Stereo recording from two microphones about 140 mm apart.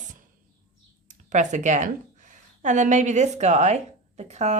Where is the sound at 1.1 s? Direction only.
60° right (ahead or behind).